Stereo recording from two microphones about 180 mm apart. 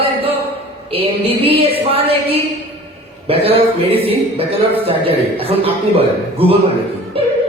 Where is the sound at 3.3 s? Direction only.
30° right (ahead or behind).